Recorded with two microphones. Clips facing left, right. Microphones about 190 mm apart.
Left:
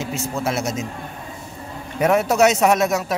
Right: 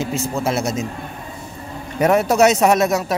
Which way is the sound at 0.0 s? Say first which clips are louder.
Right 3 dB; 30° right (ahead or behind).